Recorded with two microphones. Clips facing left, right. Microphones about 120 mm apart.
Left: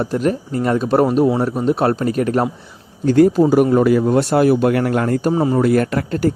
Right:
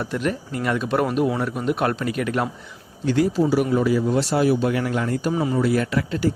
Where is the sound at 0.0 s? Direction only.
40° left (ahead or behind).